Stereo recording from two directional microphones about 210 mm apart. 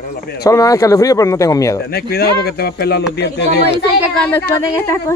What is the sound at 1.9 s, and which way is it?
Speech, 50° left (ahead or behind).